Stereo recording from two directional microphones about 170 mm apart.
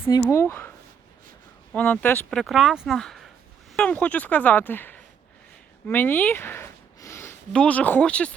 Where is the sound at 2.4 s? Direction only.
Centre (ahead or behind).